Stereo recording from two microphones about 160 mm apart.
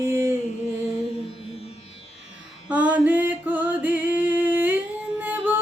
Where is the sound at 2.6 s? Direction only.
10° right (ahead or behind).